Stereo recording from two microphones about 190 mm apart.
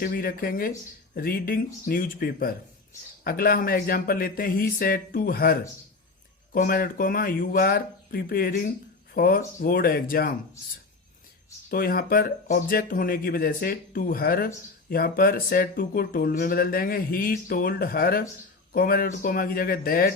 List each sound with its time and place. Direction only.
0.0 s speech: 50° left (ahead or behind)
11.7 s speech: 50° left (ahead or behind)